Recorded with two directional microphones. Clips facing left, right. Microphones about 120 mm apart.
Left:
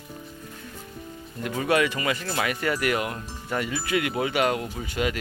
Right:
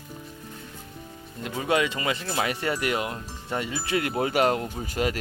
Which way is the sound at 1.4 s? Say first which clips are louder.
Left 2 dB; 20° right (ahead or behind).